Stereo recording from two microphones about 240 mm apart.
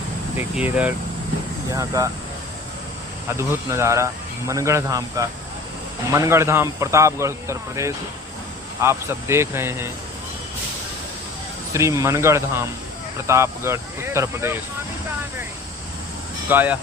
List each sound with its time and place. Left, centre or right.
0.3 s speech: centre
3.2 s speech: centre
11.7 s speech: centre
16.5 s speech: centre